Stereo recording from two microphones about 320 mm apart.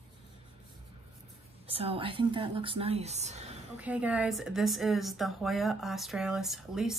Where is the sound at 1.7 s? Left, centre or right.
Centre.